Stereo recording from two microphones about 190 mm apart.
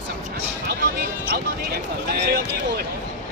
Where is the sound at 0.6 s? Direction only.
55° right (ahead or behind).